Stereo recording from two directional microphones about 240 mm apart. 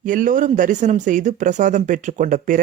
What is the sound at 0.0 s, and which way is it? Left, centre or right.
A man's voice, right.